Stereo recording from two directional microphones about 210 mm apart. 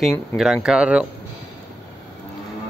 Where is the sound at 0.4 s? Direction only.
5° right (ahead or behind).